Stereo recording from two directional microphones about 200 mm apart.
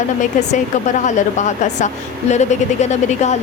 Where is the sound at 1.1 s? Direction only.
35° left (ahead or behind).